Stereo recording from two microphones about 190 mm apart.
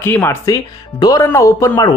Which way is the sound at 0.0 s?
15° left (ahead or behind).